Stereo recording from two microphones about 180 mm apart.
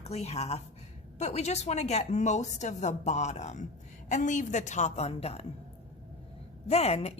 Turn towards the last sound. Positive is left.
turn(degrees=35)  # may be behind; listen again after turning